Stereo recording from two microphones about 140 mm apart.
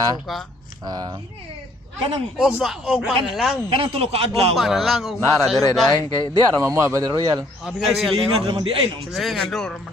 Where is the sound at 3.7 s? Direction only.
40° right (ahead or behind).